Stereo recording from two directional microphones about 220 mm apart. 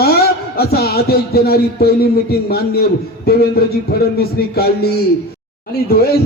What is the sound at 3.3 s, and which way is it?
Speech, 45° left (ahead or behind).